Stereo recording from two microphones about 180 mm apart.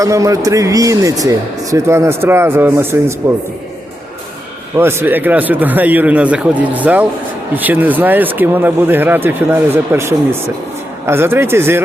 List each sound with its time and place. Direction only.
0.0 s speech: 20° right (ahead or behind)
4.8 s speech: 15° right (ahead or behind)